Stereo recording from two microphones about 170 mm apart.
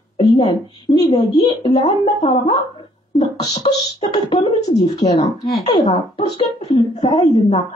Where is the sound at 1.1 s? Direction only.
25° left (ahead or behind).